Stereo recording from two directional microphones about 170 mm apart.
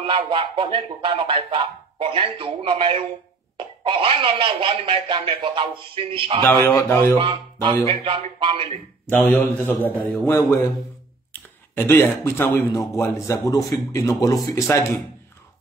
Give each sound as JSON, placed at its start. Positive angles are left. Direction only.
{"t": 0.0, "sound": "music", "side_deg": -30}
{"t": 6.5, "sound": "speech", "side_deg": 15}
{"t": 7.2, "sound": "speech", "side_deg": -25}
{"t": 7.9, "sound": "music", "side_deg": -35}
{"t": 9.6, "sound": "speech", "side_deg": 10}